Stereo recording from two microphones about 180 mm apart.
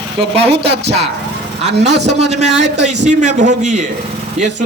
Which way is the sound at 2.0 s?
40° right (ahead or behind).